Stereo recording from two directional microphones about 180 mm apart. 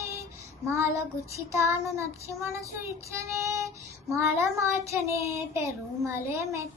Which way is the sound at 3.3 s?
15° right (ahead or behind).